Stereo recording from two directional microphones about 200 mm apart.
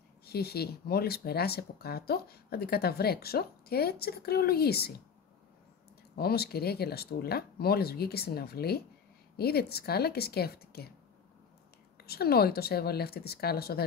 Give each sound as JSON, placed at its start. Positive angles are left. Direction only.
{"t": 0.2, "sound": "speech", "side_deg": 50}
{"t": 6.1, "sound": "speech", "side_deg": 50}
{"t": 12.0, "sound": "speech", "side_deg": 50}